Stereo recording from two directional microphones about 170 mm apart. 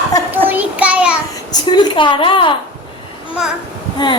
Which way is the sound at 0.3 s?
10° right (ahead or behind).